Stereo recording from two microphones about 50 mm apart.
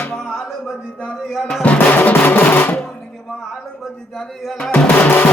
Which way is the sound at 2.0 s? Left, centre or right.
Left.